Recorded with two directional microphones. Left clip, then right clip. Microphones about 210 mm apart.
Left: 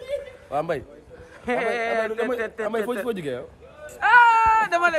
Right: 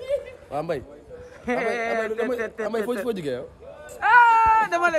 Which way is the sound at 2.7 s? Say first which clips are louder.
Even; 10° right (ahead or behind).